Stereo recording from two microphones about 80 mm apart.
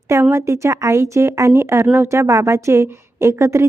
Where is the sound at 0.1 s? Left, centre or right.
Right.